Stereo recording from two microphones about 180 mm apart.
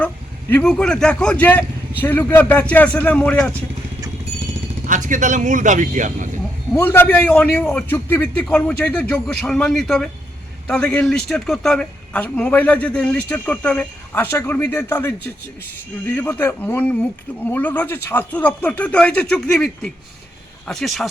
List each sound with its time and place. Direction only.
0.5 s a man's voice: 5° left (ahead or behind)
4.9 s speech: 45° right (ahead or behind)
6.7 s a man's voice: 10° left (ahead or behind)